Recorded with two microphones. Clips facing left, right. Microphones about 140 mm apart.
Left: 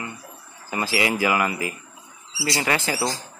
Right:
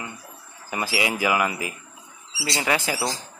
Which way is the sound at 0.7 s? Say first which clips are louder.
Left 2 dB; 15° right (ahead or behind).